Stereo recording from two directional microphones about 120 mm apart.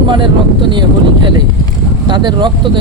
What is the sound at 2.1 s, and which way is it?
Speech, 40° right (ahead or behind).